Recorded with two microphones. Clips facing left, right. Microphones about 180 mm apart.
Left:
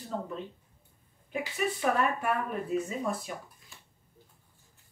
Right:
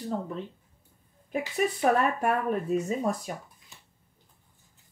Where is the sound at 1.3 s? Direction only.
40° right (ahead or behind).